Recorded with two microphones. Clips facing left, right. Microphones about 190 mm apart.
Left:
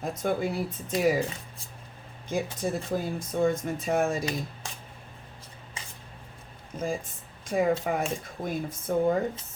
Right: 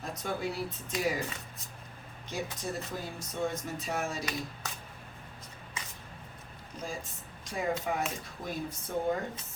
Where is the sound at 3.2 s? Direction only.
50° left (ahead or behind).